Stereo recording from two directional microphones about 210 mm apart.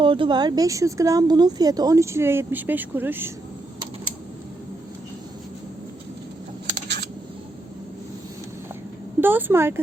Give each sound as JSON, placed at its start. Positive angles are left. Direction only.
{"t": 0.0, "sound": "speech", "side_deg": -25}
{"t": 6.8, "sound": "scissors", "side_deg": -55}
{"t": 9.2, "sound": "speech", "side_deg": -10}